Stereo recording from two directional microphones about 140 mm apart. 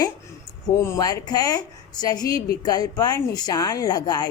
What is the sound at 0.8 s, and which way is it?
Speech, 25° left (ahead or behind).